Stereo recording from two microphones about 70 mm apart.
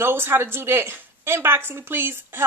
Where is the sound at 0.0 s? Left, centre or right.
Right.